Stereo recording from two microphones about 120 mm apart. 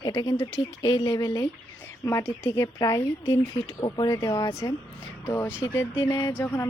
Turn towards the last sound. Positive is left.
turn(degrees=20)  # may be behind; listen again after turning